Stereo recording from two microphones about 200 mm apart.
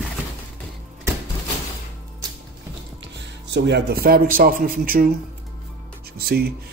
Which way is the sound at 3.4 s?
60° right (ahead or behind).